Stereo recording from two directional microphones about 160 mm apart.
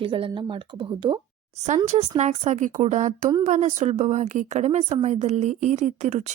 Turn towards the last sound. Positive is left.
turn(degrees=-45)  # may be behind; listen again after turning